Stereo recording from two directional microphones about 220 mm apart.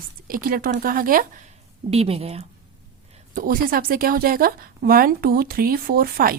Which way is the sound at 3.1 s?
40° right (ahead or behind).